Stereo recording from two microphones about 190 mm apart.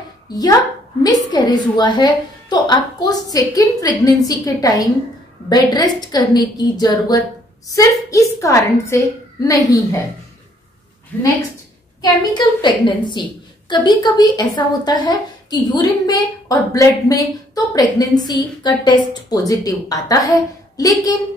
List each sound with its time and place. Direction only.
0.3 s a woman's voice: 20° left (ahead or behind)
12.0 s a woman's voice: 25° left (ahead or behind)